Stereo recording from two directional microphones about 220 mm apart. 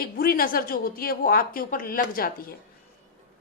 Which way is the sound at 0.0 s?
40° left (ahead or behind).